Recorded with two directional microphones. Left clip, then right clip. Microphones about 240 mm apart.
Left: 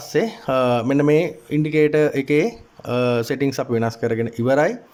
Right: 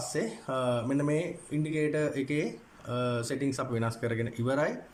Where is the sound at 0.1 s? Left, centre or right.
Left.